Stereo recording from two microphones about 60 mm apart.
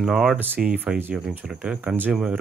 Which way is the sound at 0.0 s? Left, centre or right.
Centre.